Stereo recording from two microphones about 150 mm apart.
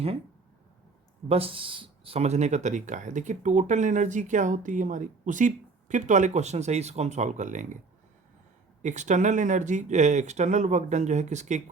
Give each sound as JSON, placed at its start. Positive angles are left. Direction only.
{"t": 1.3, "sound": "speech", "side_deg": -40}
{"t": 8.8, "sound": "speech", "side_deg": -55}